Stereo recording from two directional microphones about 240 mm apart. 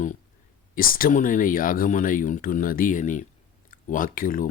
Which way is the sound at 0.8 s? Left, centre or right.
Left.